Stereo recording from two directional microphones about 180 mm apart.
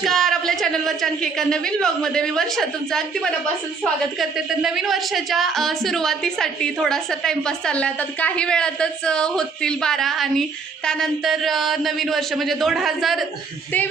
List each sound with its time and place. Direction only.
0.0 s a man's voice: centre (ahead or behind)